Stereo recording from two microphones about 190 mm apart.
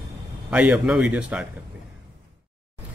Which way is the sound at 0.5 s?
5° right (ahead or behind).